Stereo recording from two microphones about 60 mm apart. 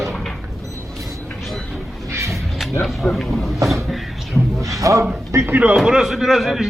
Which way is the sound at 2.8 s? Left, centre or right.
Centre.